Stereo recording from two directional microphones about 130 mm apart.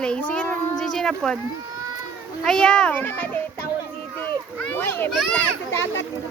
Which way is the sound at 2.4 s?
5° left (ahead or behind).